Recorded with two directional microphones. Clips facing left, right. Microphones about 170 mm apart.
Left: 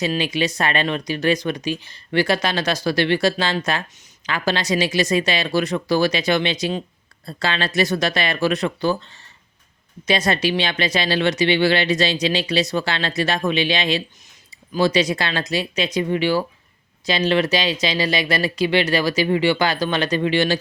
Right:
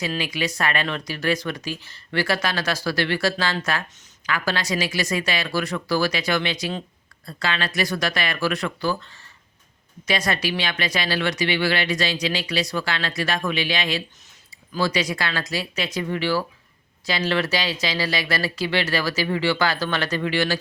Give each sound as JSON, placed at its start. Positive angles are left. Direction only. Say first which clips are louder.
{"t": 0.0, "sound": "speech", "louder": "left 5 dB", "side_deg": 25}
{"t": 10.1, "sound": "speech", "louder": "left 4 dB", "side_deg": 25}